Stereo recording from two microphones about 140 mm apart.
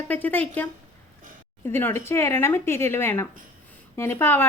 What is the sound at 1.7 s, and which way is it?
A woman's voice, 20° left (ahead or behind).